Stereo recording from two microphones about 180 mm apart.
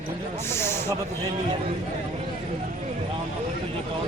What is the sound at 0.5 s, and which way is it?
Snake, 15° left (ahead or behind).